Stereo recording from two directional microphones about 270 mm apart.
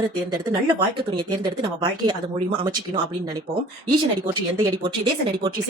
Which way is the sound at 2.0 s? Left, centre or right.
Centre.